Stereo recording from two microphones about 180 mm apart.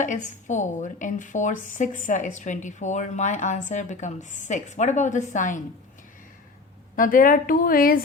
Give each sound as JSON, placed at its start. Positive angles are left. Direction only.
{"t": 0.0, "sound": "a woman's voice", "side_deg": 45}
{"t": 6.9, "sound": "a woman's voice", "side_deg": 50}